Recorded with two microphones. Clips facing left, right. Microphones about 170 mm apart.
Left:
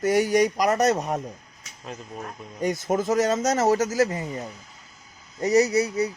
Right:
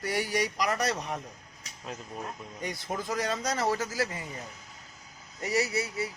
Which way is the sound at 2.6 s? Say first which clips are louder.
Left 11 dB; 45° left (ahead or behind).